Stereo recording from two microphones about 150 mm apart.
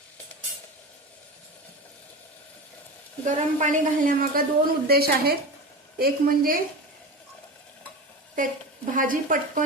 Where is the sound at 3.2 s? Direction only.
60° right (ahead or behind).